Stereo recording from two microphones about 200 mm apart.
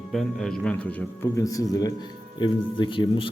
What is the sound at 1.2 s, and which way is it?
A man's voice, 15° left (ahead or behind).